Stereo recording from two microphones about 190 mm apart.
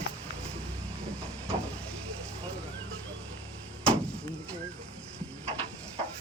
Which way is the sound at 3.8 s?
5° left (ahead or behind).